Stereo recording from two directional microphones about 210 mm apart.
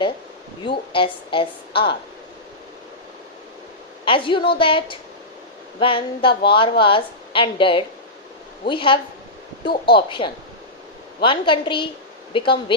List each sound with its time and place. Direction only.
0.6 s a woman's voice: 25° left (ahead or behind)
4.0 s a woman's voice: 25° left (ahead or behind)